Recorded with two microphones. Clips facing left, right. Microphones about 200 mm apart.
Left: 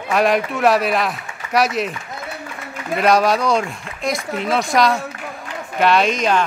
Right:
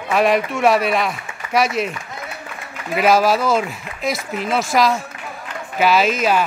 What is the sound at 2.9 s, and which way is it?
Speech, 5° right (ahead or behind).